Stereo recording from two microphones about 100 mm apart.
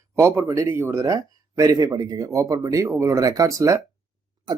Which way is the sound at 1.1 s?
35° right (ahead or behind).